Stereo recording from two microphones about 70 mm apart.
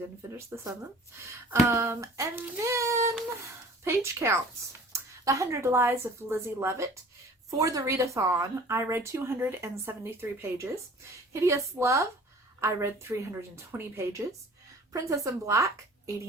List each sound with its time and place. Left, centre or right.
0.3 s a woman's voice: right
1.7 s a woman's voice: right
4.9 s a sound: right
5.7 s a woman's voice: right
7.6 s speech: right
11.3 s a woman's voice: right
14.9 s speech: right